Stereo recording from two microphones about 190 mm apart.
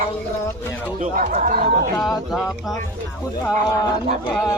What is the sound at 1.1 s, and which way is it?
Speech, 45° right (ahead or behind).